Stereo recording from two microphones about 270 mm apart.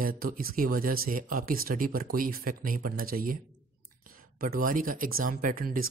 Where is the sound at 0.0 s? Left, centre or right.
Right.